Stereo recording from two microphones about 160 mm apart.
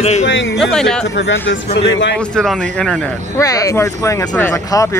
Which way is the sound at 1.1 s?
90° left.